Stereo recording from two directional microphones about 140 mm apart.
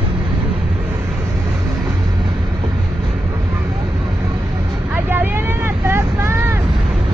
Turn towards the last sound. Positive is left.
turn(degrees=-20)  # may be behind; listen again after turning